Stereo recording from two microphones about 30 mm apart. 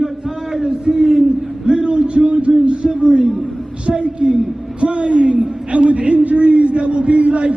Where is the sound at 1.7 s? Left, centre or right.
Right.